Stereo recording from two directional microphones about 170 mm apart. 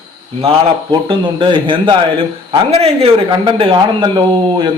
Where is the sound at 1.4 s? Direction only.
30° right (ahead or behind).